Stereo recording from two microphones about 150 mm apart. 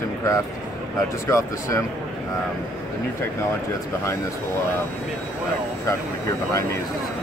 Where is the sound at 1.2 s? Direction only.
20° left (ahead or behind).